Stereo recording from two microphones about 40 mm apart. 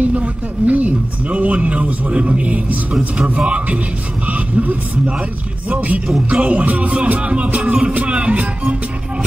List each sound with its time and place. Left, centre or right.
0.0 s a man's voice: right
3.3 s music: right
4.3 s vehicle: right
5.7 s music: right